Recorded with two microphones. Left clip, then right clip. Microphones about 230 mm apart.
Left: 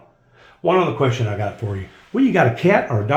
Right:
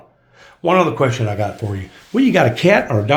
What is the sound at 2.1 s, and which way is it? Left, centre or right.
Speech, right.